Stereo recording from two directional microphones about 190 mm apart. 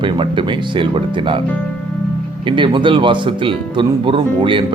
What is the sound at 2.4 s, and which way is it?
Speech, 25° right (ahead or behind).